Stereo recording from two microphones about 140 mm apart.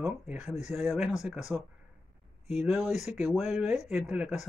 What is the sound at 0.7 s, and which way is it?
Speech, centre (ahead or behind).